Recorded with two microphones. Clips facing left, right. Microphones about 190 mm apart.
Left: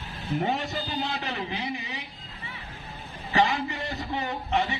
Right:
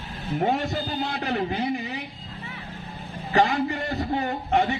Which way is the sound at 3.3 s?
50° right (ahead or behind).